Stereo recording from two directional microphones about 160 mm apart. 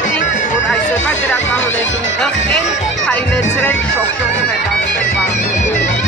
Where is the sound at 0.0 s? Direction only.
50° left (ahead or behind).